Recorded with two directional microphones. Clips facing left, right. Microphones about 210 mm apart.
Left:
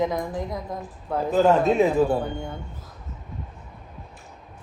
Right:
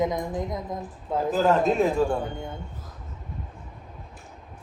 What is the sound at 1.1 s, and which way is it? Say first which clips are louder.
A man's voice: left 3 dB; centre (ahead or behind).